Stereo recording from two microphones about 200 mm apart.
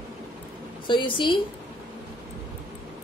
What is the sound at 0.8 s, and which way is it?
Speech, 25° left (ahead or behind).